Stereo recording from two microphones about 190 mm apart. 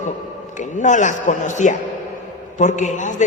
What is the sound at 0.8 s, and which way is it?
A man's voice, 40° left (ahead or behind).